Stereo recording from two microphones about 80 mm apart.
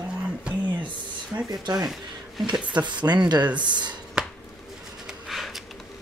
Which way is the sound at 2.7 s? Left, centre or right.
Right.